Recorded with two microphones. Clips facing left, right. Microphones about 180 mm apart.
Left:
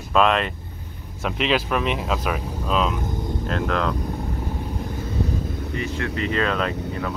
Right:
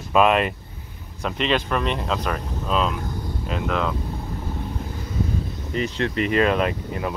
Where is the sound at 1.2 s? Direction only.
Centre (ahead or behind).